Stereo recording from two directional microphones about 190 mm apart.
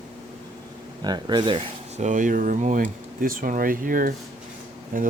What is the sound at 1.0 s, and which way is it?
Speech, 20° right (ahead or behind).